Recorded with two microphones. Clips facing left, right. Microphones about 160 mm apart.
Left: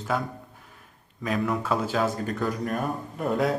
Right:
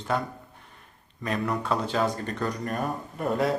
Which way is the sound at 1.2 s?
Centre (ahead or behind).